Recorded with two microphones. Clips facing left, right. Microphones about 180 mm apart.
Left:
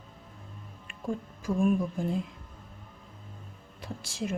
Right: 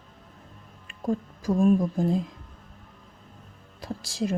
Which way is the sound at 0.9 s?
40° right (ahead or behind).